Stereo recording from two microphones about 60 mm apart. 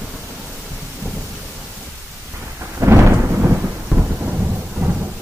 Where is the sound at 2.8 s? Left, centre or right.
Right.